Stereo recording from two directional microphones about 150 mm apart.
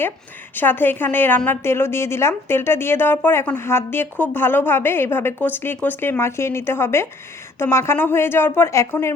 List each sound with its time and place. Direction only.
0.5 s a woman's voice: 15° left (ahead or behind)